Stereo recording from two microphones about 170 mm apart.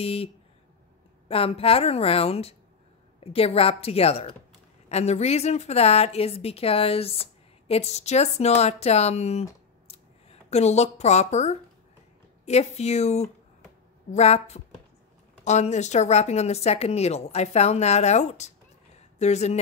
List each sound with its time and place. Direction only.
0.0 s a woman's voice: 35° left (ahead or behind)
1.3 s a woman's voice: 35° left (ahead or behind)